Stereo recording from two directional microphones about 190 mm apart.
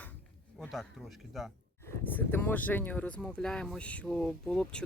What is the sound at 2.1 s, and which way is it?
Speech, 10° left (ahead or behind).